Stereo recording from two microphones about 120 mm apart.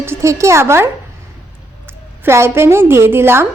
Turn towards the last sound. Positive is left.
turn(degrees=-20)  # may be behind; listen again after turning